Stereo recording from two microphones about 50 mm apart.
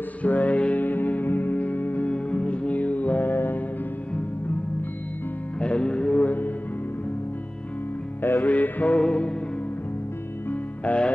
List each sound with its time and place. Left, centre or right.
0.2 s music: left
5.6 s music: left
8.2 s music: left
8.5 s mantra: left
8.9 s music: left
10.5 s music: left